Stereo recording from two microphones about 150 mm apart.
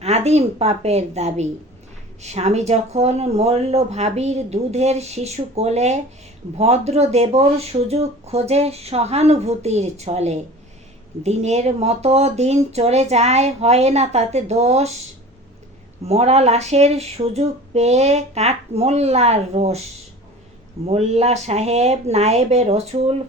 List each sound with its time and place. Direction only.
0.0 s speech: 45° right (ahead or behind)
16.0 s speech: 45° right (ahead or behind)
20.8 s speech: 45° right (ahead or behind)